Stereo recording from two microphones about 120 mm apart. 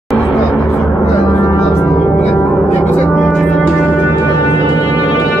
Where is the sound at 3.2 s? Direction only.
Centre (ahead or behind).